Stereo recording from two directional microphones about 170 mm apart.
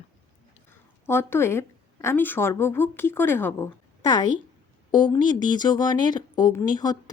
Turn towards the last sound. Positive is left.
turn(degrees=25)  # may be behind; listen again after turning